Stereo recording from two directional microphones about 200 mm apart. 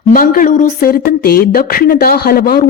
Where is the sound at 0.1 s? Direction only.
45° left (ahead or behind).